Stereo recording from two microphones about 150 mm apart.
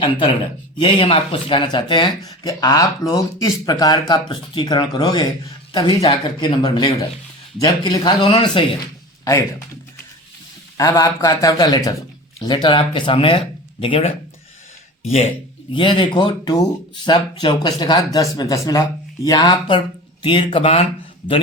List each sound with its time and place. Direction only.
0.8 s speech: 35° left (ahead or behind)
9.2 s speech: 20° left (ahead or behind)
10.8 s speech: 20° left (ahead or behind); by 15.3 s 45° left (ahead or behind)
15.7 s speech: 35° left (ahead or behind)